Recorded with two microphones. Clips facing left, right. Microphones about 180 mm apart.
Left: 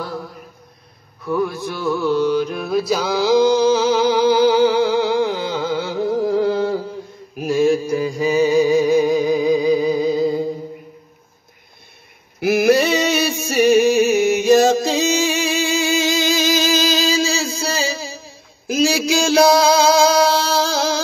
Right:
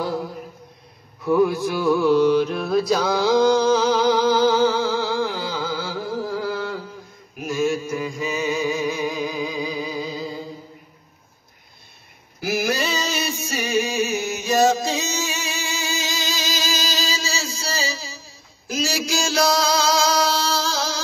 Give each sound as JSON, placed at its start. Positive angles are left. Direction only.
{"t": 0.0, "sound": "mantra", "side_deg": -15}
{"t": 1.2, "sound": "a man's voice", "side_deg": -15}
{"t": 1.8, "sound": "mantra", "side_deg": 0}
{"t": 4.1, "sound": "music", "side_deg": 10}
{"t": 7.3, "sound": "mantra", "side_deg": 35}
{"t": 12.4, "sound": "a sound", "side_deg": 65}
{"t": 15.1, "sound": "music", "side_deg": 90}
{"t": 15.4, "sound": "music", "side_deg": 55}